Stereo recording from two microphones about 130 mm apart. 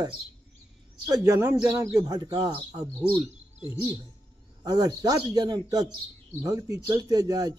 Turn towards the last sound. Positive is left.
turn(degrees=-30)  # may be behind; listen again after turning